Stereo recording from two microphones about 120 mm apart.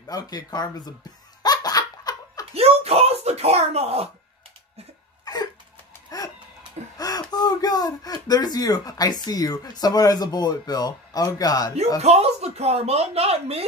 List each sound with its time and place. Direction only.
0.1 s speech: 35° left (ahead or behind)
1.4 s laughter: 35° left (ahead or behind)
2.5 s speech: 60° right (ahead or behind)
5.2 s cough: 30° left (ahead or behind)
6.0 s chicken: 30° left (ahead or behind)
7.0 s speech: 35° left (ahead or behind)
12.0 s speech: 60° right (ahead or behind)